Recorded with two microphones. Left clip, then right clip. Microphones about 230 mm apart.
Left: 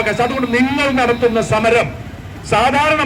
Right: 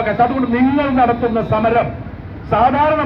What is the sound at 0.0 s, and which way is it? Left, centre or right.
A man's voice, left.